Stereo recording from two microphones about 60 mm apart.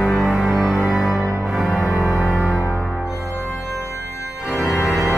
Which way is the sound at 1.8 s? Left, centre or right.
Left.